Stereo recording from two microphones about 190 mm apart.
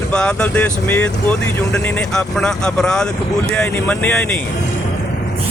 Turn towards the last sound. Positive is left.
turn(degrees=5)  # may be behind; listen again after turning